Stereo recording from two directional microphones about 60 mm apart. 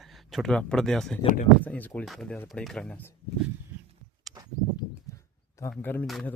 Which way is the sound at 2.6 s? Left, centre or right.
Centre.